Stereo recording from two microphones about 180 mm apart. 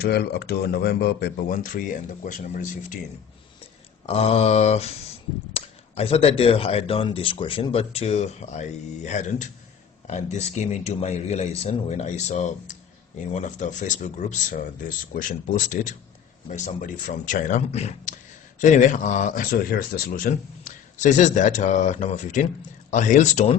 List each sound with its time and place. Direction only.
0.0 s speech: 60° left (ahead or behind); by 3.0 s 45° left (ahead or behind)
4.0 s a man's voice: 35° left (ahead or behind)